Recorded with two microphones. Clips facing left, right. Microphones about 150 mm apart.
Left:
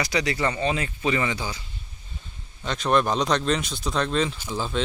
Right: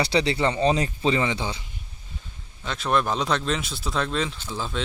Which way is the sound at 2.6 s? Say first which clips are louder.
Left 2 dB; 5° right (ahead or behind).